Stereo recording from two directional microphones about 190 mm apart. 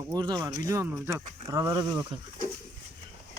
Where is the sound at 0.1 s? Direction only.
25° right (ahead or behind).